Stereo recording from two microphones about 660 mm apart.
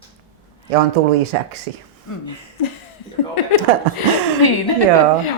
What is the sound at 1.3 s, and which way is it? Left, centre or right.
Speech, right.